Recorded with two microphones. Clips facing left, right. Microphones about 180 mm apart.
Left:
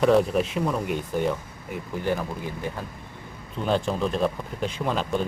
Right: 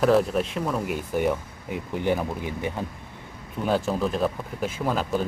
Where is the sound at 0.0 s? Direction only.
Centre (ahead or behind); by 2.8 s 20° right (ahead or behind).